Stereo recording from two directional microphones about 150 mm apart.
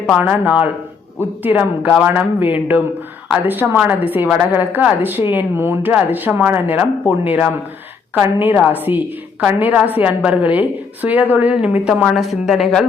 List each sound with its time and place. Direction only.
0.2 s a woman's voice: 10° right (ahead or behind)